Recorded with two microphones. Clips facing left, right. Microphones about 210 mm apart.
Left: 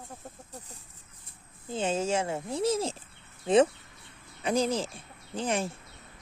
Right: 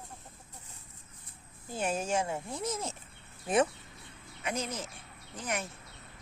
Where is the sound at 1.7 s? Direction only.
25° left (ahead or behind).